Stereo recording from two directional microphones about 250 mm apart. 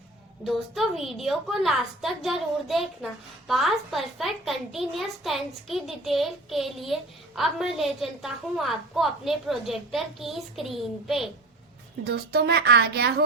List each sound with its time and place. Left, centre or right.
0.4 s a woman's voice: centre
12.1 s speech: right